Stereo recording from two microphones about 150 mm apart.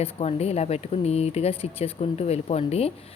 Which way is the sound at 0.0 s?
40° left (ahead or behind).